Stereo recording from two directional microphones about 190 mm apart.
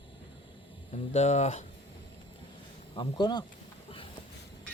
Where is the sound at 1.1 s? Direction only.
35° left (ahead or behind).